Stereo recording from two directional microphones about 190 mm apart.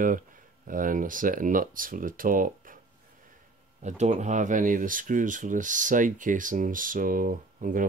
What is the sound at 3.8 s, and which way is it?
Speech, 40° right (ahead or behind).